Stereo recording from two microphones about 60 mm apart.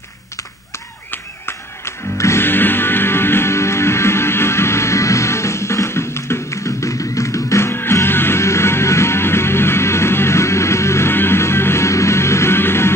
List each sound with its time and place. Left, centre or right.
1.1 s music: left
2.4 s music: left